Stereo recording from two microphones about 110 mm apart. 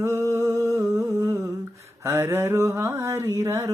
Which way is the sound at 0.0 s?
25° right (ahead or behind).